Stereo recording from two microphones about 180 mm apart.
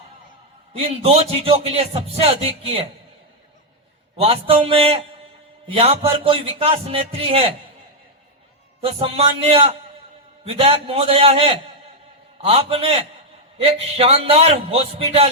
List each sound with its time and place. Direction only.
0.7 s speech: 30° right (ahead or behind)
4.2 s speech: 35° right (ahead or behind)
8.8 s speech: 30° right (ahead or behind)